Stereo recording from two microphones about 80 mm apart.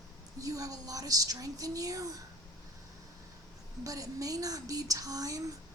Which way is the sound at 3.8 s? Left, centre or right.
Right.